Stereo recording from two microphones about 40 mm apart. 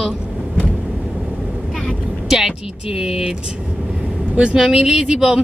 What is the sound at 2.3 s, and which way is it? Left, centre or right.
Speech, centre.